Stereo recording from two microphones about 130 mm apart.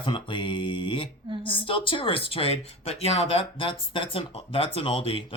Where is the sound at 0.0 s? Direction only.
40° left (ahead or behind).